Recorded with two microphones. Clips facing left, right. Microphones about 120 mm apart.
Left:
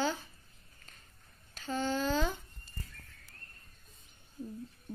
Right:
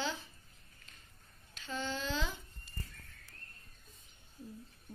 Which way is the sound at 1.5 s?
45° left (ahead or behind).